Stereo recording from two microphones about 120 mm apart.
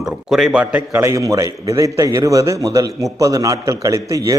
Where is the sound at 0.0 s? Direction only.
5° right (ahead or behind).